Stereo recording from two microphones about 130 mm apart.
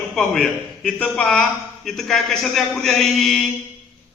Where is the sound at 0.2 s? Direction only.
5° left (ahead or behind).